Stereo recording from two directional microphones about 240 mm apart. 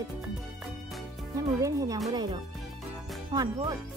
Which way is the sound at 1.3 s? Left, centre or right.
Centre.